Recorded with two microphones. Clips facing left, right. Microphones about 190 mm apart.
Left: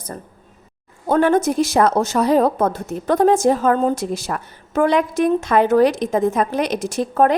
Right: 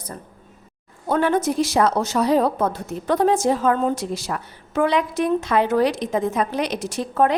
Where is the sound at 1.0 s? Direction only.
45° left (ahead or behind).